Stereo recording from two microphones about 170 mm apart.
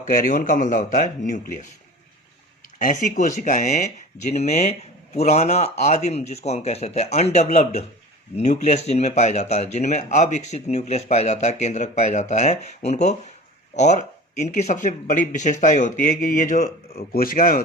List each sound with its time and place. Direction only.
0.0 s speech: 50° left (ahead or behind)
2.7 s speech: 50° left (ahead or behind)
16.9 s speech: 60° left (ahead or behind)